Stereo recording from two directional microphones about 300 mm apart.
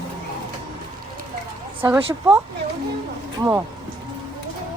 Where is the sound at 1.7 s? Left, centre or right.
Centre.